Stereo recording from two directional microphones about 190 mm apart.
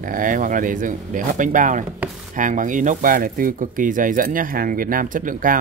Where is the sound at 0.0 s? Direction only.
45° right (ahead or behind).